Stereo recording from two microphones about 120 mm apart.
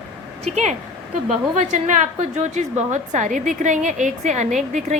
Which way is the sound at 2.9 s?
90° right.